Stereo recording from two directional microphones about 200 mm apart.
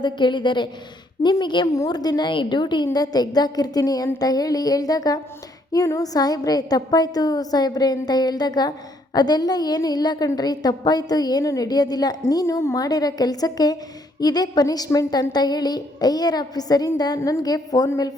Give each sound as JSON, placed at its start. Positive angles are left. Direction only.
{"t": 0.0, "sound": "a woman's voice", "side_deg": 25}